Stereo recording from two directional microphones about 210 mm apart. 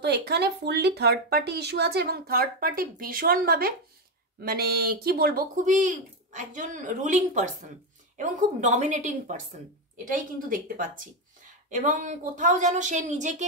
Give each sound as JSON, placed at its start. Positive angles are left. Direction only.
{"t": 0.0, "sound": "speech", "side_deg": -50}